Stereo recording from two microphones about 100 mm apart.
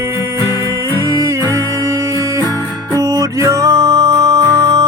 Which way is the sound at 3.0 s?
30° right (ahead or behind).